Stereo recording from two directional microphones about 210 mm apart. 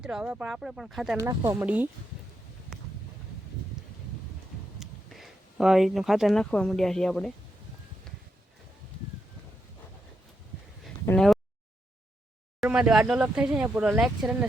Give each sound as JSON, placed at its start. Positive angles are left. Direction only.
{"t": 0.0, "sound": "speech", "side_deg": -5}
{"t": 1.1, "sound": "speech", "side_deg": -15}
{"t": 4.8, "sound": "speech", "side_deg": 0}
{"t": 11.0, "sound": "speech", "side_deg": 5}
{"t": 12.5, "sound": "speech", "side_deg": -5}